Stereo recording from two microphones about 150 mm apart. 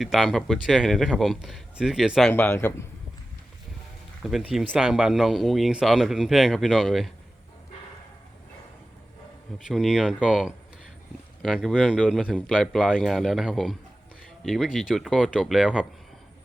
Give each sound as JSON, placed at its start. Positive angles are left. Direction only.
{"t": 0.0, "sound": "speech", "side_deg": 0}
{"t": 2.3, "sound": "a man's voice", "side_deg": 15}
{"t": 4.2, "sound": "speech", "side_deg": 0}
{"t": 9.6, "sound": "speech", "side_deg": 0}